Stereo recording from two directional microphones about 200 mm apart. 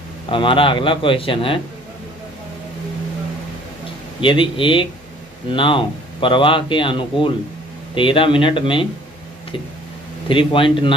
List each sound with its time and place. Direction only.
0.3 s a man's voice: 25° left (ahead or behind)
4.2 s a man's voice: 25° left (ahead or behind)
10.2 s a man's voice: 25° left (ahead or behind)